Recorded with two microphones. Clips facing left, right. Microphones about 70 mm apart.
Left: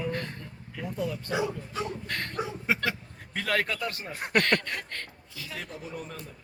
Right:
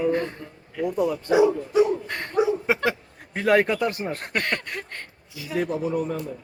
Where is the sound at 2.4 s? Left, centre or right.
Centre.